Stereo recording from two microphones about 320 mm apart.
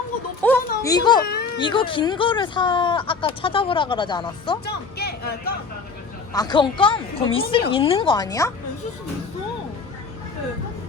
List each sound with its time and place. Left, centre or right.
0.4 s a sound: centre
1.2 s speech: left
1.5 s speech: centre
4.6 s speech: left
6.3 s speech: centre